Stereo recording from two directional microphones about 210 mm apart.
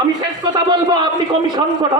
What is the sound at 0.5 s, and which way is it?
A man's voice, 20° right (ahead or behind).